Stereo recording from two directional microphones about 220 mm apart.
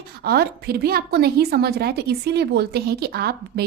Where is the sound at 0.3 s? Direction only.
45° right (ahead or behind).